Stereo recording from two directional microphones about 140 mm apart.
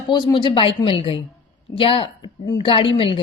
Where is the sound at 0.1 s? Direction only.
30° left (ahead or behind).